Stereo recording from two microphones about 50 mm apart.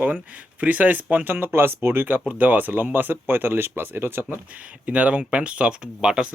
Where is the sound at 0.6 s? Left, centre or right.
Right.